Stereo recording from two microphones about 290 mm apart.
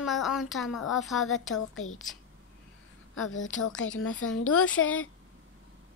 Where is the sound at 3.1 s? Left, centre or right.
Left.